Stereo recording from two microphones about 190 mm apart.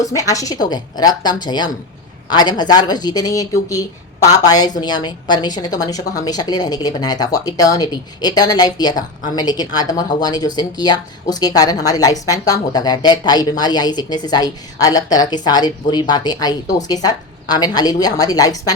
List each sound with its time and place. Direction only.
0.0 s a woman's voice: 20° left (ahead or behind)